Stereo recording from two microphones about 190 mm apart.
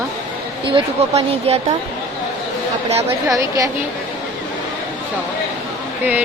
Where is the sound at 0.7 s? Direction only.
30° right (ahead or behind).